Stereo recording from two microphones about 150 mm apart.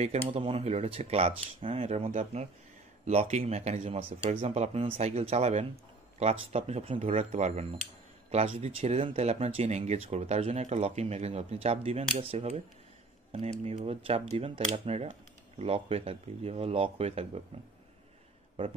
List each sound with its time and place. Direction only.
0.0 s speech: 40° right (ahead or behind)